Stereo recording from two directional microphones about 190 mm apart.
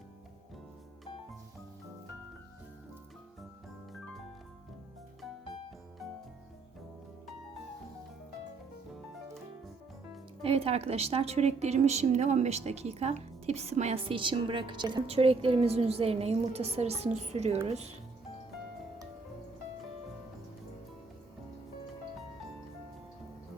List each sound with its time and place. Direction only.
10.4 s a woman's voice: 30° right (ahead or behind)